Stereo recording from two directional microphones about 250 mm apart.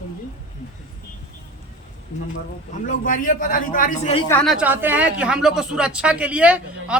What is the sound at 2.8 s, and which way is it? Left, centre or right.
A man's voice, left.